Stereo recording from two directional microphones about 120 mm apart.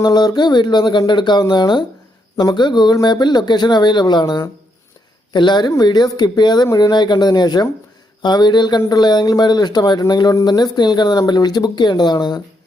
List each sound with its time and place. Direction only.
0.0 s speech: 35° left (ahead or behind)